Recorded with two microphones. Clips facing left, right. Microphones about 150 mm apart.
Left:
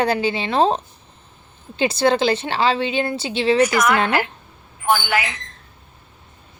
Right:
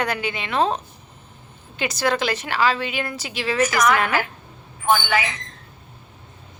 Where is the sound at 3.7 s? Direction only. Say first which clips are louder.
Left 1 dB; 5° left (ahead or behind).